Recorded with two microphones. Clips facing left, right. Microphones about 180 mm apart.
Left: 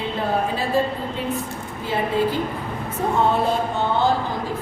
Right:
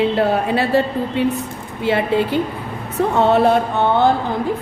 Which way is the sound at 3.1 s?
75° right (ahead or behind).